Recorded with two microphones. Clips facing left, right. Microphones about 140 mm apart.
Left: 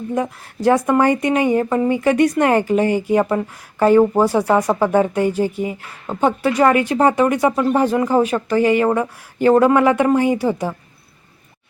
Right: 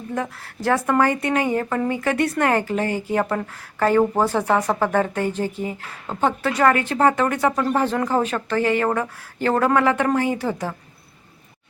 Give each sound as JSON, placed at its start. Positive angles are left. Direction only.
{"t": 0.1, "sound": "a woman's voice", "side_deg": 20}